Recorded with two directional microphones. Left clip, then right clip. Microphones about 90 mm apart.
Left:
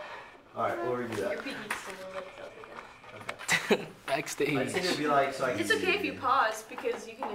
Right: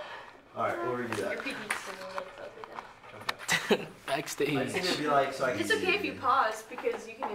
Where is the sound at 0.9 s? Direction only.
5° right (ahead or behind).